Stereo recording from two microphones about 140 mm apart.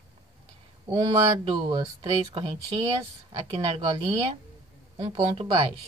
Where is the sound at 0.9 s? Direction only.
25° right (ahead or behind).